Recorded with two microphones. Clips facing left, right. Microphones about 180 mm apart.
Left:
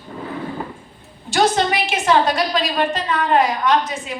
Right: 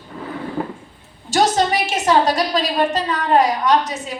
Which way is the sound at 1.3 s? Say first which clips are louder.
Right 1 dB; 40° right (ahead or behind).